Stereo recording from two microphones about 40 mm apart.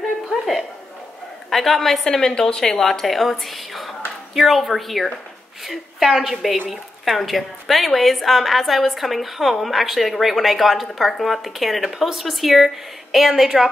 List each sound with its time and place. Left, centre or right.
0.3 s a sound: centre
1.5 s a woman's voice: centre
2.0 s a woman's voice: centre